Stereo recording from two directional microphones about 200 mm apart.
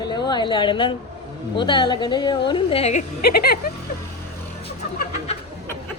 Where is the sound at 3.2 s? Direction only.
50° left (ahead or behind).